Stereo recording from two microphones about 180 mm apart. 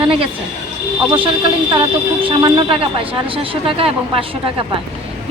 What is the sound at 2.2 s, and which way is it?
Speech, 30° right (ahead or behind).